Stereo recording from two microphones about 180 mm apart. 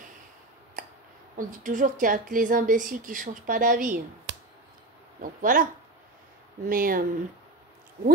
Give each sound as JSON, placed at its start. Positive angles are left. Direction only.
{"t": 1.3, "sound": "a woman's voice", "side_deg": -45}
{"t": 4.3, "sound": "a sound", "side_deg": -80}
{"t": 5.2, "sound": "a woman's voice", "side_deg": -50}
{"t": 6.7, "sound": "a woman's voice", "side_deg": -50}